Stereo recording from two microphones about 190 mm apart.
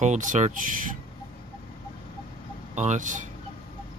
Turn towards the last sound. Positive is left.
turn(degrees=-40)  # may be behind; listen again after turning